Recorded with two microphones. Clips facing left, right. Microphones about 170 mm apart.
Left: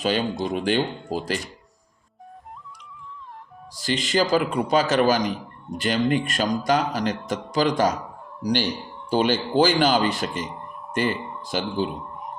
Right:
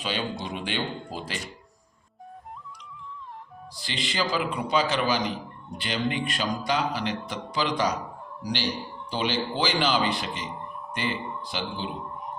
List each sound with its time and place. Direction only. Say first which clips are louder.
0.0 s speech: left 7 dB; 45° left (ahead or behind)
3.8 s speech: left 8 dB; 45° left (ahead or behind)